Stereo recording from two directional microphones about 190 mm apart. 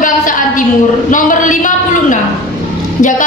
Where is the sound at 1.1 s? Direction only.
45° left (ahead or behind).